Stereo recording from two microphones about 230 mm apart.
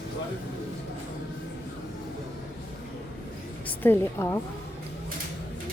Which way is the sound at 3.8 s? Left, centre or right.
Centre.